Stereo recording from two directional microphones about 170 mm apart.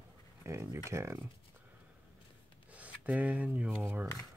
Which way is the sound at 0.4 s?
15° right (ahead or behind).